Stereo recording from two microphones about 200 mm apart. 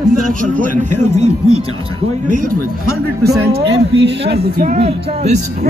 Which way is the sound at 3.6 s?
60° right (ahead or behind).